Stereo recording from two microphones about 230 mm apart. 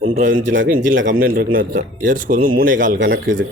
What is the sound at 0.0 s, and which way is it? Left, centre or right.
Speech, right.